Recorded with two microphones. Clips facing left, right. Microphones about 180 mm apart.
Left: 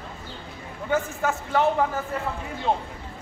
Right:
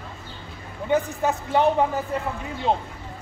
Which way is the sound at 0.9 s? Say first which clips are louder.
Right 3 dB; 20° right (ahead or behind).